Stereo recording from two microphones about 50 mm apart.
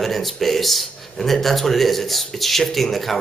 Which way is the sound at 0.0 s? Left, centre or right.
Centre.